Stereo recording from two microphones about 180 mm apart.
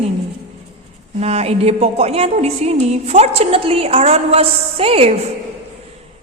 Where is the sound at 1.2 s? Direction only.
35° right (ahead or behind).